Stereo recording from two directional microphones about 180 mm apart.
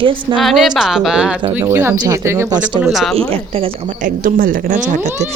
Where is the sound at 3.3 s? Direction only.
30° right (ahead or behind).